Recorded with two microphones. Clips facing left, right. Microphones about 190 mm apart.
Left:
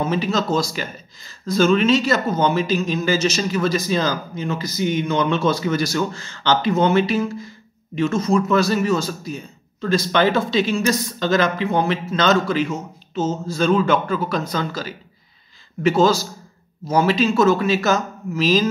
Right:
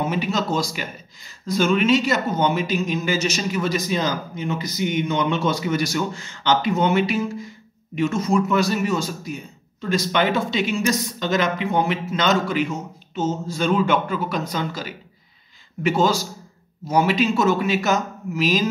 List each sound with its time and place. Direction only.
0.0 s speech: 15° right (ahead or behind)